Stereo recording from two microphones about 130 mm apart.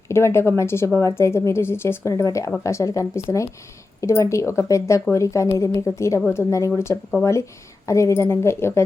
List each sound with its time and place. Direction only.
0.1 s a woman's voice: 20° left (ahead or behind)